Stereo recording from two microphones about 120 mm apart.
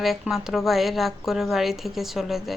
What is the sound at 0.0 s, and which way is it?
Speech, centre (ahead or behind).